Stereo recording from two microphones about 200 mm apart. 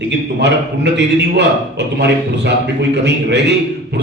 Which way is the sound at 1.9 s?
60° right (ahead or behind).